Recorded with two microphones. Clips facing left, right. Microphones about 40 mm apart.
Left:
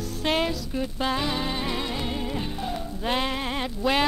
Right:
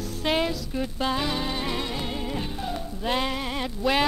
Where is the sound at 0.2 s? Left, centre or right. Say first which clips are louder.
Even; centre.